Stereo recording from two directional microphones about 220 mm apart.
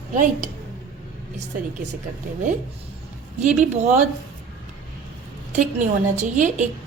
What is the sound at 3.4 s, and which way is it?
Speech, 35° right (ahead or behind).